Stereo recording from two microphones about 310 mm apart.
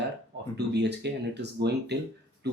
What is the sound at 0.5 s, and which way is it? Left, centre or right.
Speech, right.